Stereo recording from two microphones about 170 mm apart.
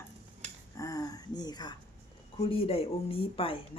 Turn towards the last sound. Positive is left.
turn(degrees=30)  # may be behind; listen again after turning